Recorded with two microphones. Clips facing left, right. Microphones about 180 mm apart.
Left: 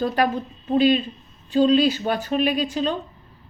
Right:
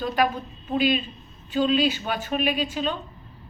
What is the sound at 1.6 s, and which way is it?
Speech, 40° left (ahead or behind).